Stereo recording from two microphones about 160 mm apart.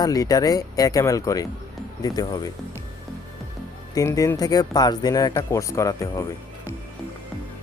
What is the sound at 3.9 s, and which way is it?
Speech, 20° left (ahead or behind).